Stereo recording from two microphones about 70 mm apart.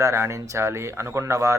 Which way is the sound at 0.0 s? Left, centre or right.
Right.